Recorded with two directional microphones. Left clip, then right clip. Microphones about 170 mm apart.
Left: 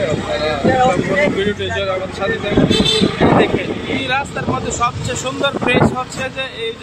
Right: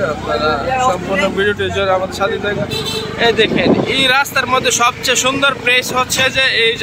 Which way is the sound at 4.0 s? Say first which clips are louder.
Right 4 dB; 20° right (ahead or behind).